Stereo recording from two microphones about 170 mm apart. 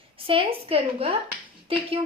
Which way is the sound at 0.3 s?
30° right (ahead or behind).